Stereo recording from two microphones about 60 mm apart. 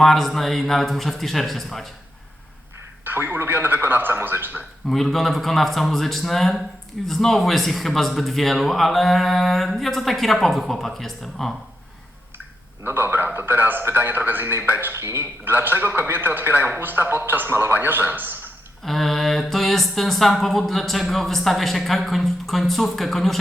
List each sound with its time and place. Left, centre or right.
0.0 s mantra: centre
3.0 s a man's voice: right
4.9 s mantra: centre
12.8 s a man's voice: right
15.5 s a man's voice: right
18.9 s mantra: centre